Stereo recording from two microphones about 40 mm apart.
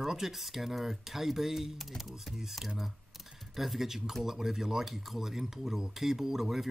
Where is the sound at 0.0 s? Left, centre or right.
Centre.